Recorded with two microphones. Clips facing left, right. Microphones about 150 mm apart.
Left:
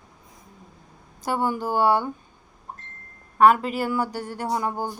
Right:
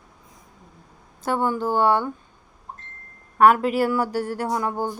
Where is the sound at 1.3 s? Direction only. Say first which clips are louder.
Right 2 dB; 5° left (ahead or behind).